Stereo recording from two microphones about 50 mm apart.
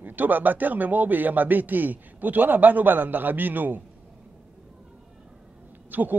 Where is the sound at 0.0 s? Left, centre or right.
Right.